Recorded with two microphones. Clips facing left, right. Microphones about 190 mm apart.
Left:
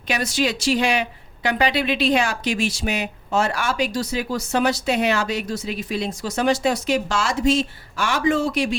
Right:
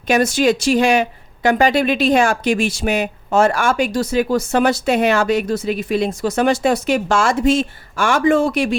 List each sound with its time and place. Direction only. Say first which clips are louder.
0.1 s speech: right 8 dB; 50° right (ahead or behind)